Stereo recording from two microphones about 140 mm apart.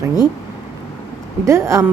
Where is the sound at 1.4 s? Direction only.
20° right (ahead or behind).